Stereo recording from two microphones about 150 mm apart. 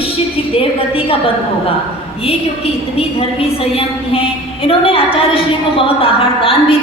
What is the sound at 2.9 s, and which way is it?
A woman's voice, 40° left (ahead or behind).